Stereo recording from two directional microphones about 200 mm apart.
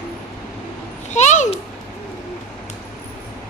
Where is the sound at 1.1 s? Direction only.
35° left (ahead or behind).